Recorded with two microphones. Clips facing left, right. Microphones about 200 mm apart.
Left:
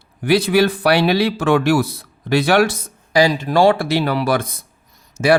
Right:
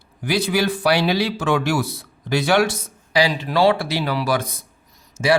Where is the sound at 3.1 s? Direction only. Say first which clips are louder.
Left 4 dB; 45° left (ahead or behind).